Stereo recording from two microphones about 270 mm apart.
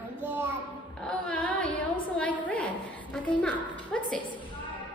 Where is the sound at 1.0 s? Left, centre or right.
Centre.